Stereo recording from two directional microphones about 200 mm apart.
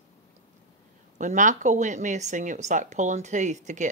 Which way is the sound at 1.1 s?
40° right (ahead or behind).